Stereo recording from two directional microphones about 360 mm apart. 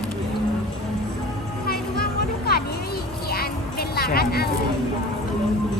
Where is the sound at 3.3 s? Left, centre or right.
Left.